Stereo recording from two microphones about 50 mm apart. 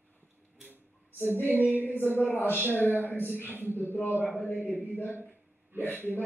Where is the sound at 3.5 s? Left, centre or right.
Right.